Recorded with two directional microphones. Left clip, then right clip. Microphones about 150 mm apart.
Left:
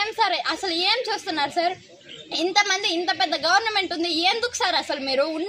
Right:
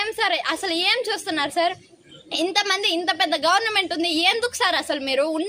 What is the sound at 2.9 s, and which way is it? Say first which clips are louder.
Speech: right 1 dB; 15° right (ahead or behind).